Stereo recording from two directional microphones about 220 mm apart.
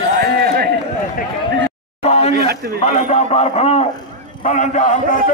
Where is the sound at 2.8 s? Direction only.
30° left (ahead or behind).